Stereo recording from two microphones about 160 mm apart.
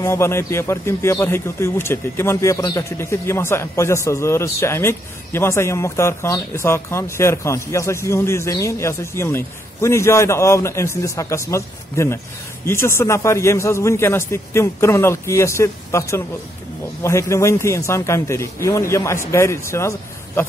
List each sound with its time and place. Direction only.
0.0 s speech: 15° left (ahead or behind)